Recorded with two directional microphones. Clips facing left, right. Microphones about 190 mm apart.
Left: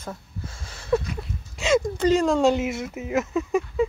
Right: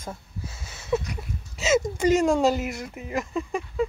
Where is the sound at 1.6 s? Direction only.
10° right (ahead or behind).